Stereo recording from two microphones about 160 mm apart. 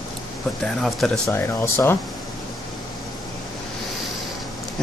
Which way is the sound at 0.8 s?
5° left (ahead or behind).